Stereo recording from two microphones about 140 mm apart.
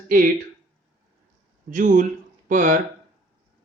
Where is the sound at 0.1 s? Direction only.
90° right.